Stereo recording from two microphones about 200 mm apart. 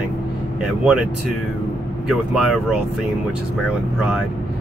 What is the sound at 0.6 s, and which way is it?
Speech, centre (ahead or behind).